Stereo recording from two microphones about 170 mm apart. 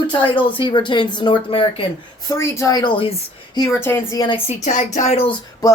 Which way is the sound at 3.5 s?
20° left (ahead or behind).